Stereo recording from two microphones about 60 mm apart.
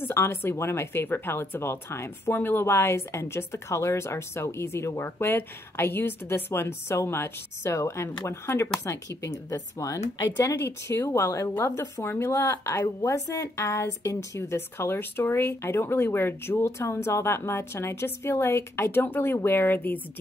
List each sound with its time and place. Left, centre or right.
0.0 s speech: left
9.5 s speech: left
10.5 s speech: left
12.3 s speech: left